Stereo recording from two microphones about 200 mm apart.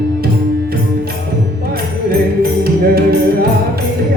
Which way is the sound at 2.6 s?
50° right (ahead or behind).